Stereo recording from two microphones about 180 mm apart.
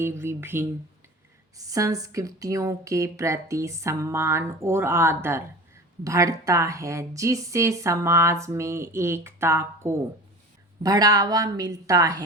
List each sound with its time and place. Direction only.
0.0 s a woman's voice: 15° right (ahead or behind)